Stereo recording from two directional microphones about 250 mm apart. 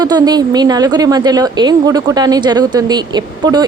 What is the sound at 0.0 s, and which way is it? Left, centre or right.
A woman's voice, centre.